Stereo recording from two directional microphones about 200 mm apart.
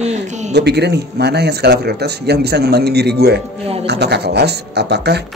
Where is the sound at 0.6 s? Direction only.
55° right (ahead or behind).